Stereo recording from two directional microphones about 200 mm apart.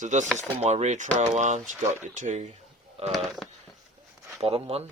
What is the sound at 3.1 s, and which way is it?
Speech, centre (ahead or behind).